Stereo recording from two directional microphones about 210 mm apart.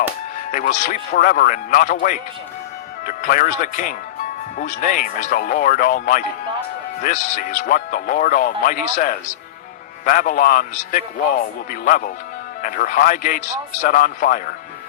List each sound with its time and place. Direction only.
0.5 s speech: 35° left (ahead or behind)